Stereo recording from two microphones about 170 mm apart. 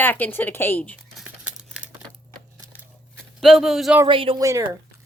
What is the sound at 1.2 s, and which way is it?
Crumpling, 5° right (ahead or behind).